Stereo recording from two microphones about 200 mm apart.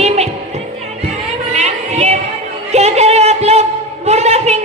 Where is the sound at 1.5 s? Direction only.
35° right (ahead or behind).